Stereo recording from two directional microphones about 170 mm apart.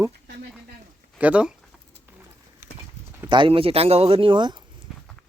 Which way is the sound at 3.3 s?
30° right (ahead or behind).